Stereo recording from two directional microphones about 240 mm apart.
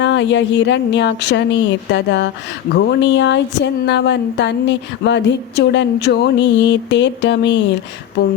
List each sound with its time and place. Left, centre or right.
0.0 s speech: left